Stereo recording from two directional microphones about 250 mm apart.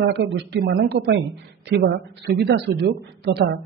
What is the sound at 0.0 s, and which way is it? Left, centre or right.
Speech, right.